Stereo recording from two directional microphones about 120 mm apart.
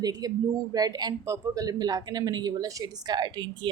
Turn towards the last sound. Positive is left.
turn(degrees=-40)  # may be behind; listen again after turning